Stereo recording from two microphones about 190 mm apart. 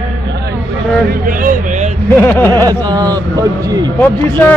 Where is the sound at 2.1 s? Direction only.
10° left (ahead or behind).